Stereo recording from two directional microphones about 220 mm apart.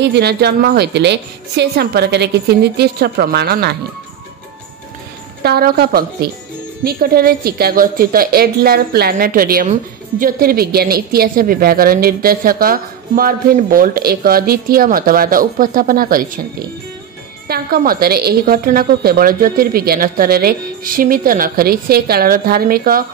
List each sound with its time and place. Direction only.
0.0 s a woman's voice: 50° right (ahead or behind)
5.4 s a woman's voice: 45° right (ahead or behind)
17.5 s a woman's voice: 40° right (ahead or behind)